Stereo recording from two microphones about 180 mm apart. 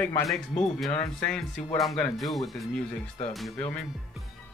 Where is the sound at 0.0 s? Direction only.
Centre (ahead or behind).